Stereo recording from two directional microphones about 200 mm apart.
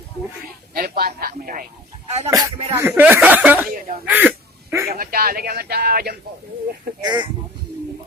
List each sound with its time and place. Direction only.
0.7 s a sound: 50° right (ahead or behind)
2.3 s speech: 10° right (ahead or behind)
3.7 s a sound: 45° right (ahead or behind)
4.1 s hiccup: 10° right (ahead or behind)
4.9 s speech: 50° right (ahead or behind)
7.0 s speech: 20° right (ahead or behind)